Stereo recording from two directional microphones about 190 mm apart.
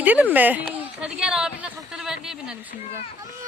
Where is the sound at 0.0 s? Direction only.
10° right (ahead or behind).